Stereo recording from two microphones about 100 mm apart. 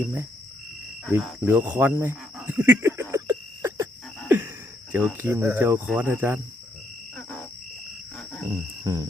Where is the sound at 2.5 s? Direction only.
15° right (ahead or behind).